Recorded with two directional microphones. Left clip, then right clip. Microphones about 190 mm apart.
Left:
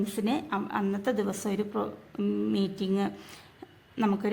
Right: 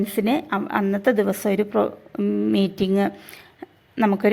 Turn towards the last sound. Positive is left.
turn(degrees=-25)  # may be behind; listen again after turning